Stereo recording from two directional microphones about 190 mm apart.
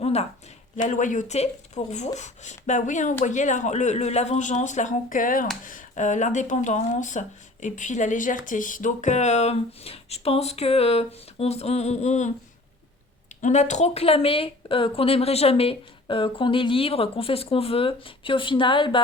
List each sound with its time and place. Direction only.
0.0 s a sound: 35° left (ahead or behind)
0.8 s speech: 40° left (ahead or behind)
13.4 s speech: 40° left (ahead or behind)